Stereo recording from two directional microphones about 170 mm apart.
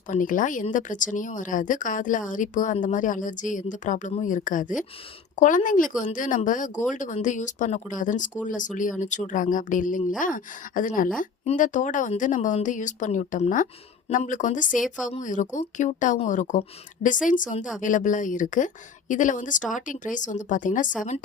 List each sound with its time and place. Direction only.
0.1 s a woman's voice: 50° left (ahead or behind)